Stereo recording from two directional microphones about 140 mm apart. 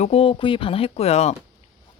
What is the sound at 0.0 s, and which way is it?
Speech, 45° left (ahead or behind).